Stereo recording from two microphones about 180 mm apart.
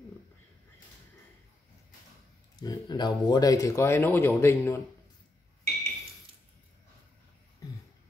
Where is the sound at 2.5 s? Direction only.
20° left (ahead or behind).